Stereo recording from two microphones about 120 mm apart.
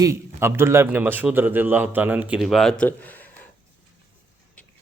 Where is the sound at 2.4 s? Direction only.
5° left (ahead or behind).